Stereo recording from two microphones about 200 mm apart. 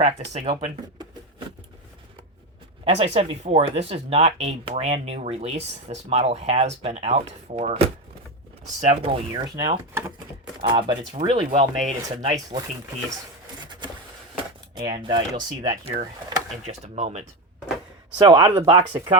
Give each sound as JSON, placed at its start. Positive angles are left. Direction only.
{"t": 0.0, "sound": "speech", "side_deg": -25}
{"t": 2.8, "sound": "speech", "side_deg": -30}
{"t": 9.6, "sound": "speech", "side_deg": -20}
{"t": 13.7, "sound": "a sound", "side_deg": -20}
{"t": 14.8, "sound": "speech", "side_deg": -25}
{"t": 15.7, "sound": "speech", "side_deg": -35}
{"t": 18.2, "sound": "speech", "side_deg": -25}